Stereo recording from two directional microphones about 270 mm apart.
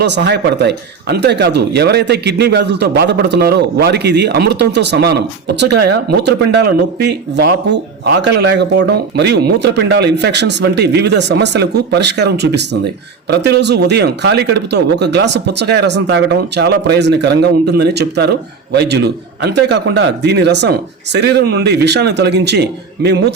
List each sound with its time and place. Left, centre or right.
0.0 s speech: right